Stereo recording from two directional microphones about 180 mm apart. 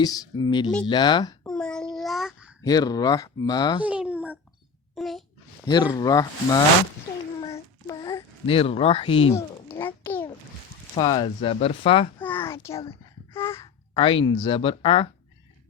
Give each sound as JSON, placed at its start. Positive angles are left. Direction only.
{"t": 0.0, "sound": "speech", "side_deg": 20}
{"t": 1.5, "sound": "child singing", "side_deg": 5}
{"t": 2.6, "sound": "speech", "side_deg": 20}
{"t": 3.8, "sound": "babbling", "side_deg": -5}
{"t": 4.9, "sound": "a sound", "side_deg": 0}
{"t": 5.6, "sound": "speech", "side_deg": 25}
{"t": 7.9, "sound": "a sound", "side_deg": 20}
{"t": 8.4, "sound": "speech", "side_deg": 30}
{"t": 9.3, "sound": "a sound", "side_deg": 15}
{"t": 10.9, "sound": "speech", "side_deg": 25}
{"t": 12.2, "sound": "a sound", "side_deg": 10}
{"t": 13.3, "sound": "throat clearing", "side_deg": 15}
{"t": 13.9, "sound": "speech", "side_deg": 30}